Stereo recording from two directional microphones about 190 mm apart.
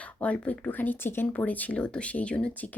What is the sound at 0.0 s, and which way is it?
Speech, 5° left (ahead or behind).